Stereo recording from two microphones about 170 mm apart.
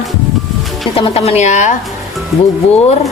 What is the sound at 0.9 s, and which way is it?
Speech, 35° left (ahead or behind).